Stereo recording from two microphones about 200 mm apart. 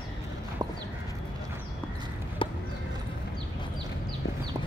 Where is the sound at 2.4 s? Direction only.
25° left (ahead or behind).